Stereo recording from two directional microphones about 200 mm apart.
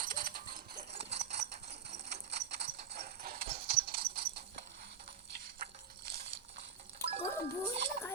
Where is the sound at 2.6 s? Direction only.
35° right (ahead or behind).